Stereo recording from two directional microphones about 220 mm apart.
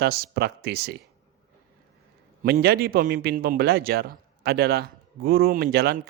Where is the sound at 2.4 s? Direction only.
45° right (ahead or behind).